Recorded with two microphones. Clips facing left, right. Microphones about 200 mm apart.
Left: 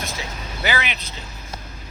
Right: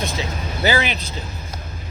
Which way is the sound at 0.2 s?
30° right (ahead or behind).